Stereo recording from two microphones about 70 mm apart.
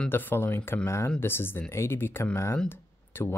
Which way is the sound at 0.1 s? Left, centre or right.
Left.